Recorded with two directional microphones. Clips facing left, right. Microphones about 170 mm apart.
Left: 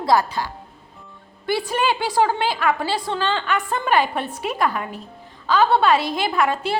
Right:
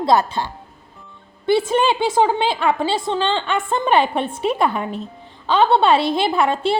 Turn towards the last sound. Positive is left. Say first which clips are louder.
# right 3 dB
turn(degrees=-25)  # may be behind; listen again after turning